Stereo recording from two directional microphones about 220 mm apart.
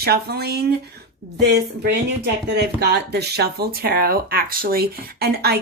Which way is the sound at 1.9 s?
45° right (ahead or behind).